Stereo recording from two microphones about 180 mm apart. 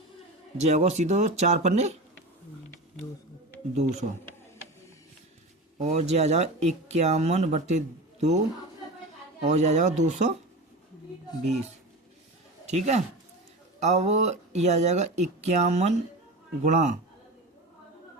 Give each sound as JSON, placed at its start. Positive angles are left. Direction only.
{"t": 0.5, "sound": "speech", "side_deg": -40}
{"t": 5.7, "sound": "speech", "side_deg": -35}
{"t": 11.4, "sound": "speech", "side_deg": -40}